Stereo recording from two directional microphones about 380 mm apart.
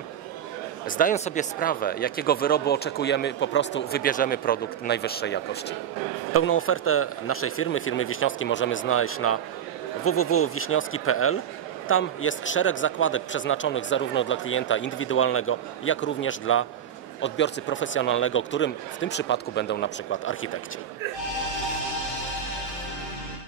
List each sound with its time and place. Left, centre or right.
0.8 s a man's voice: left